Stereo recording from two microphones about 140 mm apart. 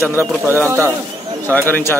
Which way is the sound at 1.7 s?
15° left (ahead or behind).